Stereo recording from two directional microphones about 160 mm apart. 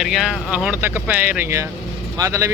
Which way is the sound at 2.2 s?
20° right (ahead or behind).